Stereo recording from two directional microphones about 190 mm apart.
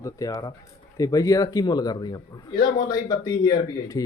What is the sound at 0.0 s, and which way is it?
Speech, 20° left (ahead or behind).